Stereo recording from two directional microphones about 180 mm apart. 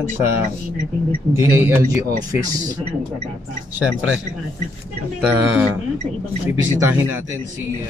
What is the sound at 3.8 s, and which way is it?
Speech, 5° right (ahead or behind).